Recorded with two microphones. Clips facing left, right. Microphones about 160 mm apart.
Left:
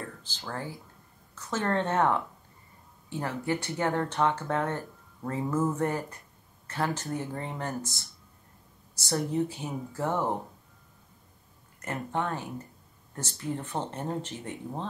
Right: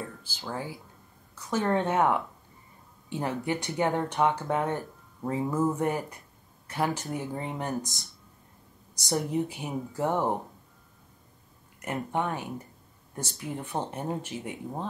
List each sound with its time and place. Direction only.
0.2 s speech: 10° right (ahead or behind)
11.8 s speech: 15° right (ahead or behind)